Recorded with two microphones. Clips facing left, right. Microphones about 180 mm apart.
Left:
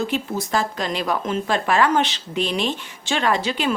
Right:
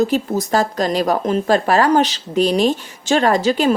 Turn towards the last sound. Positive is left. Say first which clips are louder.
# right 6 dB
turn(degrees=-40)  # may be behind; listen again after turning